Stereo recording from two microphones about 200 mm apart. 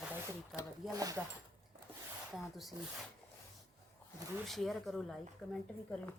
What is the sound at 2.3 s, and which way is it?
Speech, centre (ahead or behind).